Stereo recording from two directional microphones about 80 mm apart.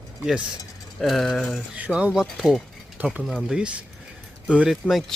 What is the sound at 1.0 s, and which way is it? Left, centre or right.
Speech, centre.